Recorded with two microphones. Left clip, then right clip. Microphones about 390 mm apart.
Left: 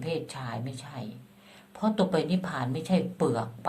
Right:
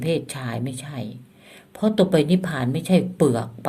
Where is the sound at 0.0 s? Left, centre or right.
Right.